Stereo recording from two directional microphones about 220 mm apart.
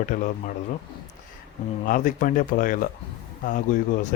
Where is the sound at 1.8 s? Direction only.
35° left (ahead or behind).